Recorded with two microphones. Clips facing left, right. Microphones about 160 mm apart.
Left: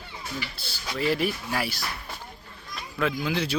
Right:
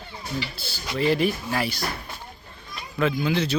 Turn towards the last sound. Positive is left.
turn(degrees=5)  # may be behind; listen again after turning